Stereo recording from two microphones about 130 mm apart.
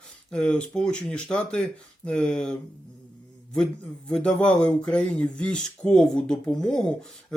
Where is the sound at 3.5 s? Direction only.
10° left (ahead or behind).